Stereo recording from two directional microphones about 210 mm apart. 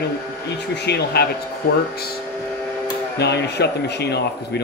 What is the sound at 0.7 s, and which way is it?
Speech, 50° left (ahead or behind).